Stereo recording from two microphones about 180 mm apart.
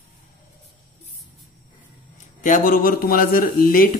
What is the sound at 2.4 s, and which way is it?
A woman's voice, 50° left (ahead or behind).